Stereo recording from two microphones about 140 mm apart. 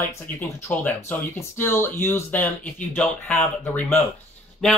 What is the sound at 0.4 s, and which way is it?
Speech, 15° left (ahead or behind).